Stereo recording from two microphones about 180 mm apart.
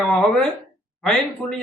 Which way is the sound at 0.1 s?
10° left (ahead or behind).